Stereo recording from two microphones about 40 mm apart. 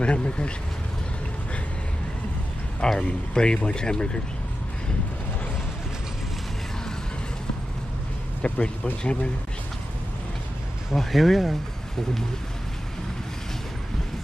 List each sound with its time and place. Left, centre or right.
0.0 s speech: left
3.0 s speech: left
8.4 s speech: left
9.0 s speech: left
10.9 s speech: centre